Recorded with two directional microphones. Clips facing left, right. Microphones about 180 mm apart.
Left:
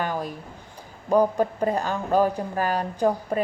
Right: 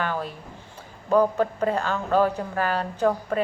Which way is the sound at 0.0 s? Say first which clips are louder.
Left 1 dB; 15° left (ahead or behind).